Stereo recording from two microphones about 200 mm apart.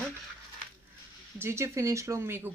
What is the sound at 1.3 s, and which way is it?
Speech, 10° right (ahead or behind).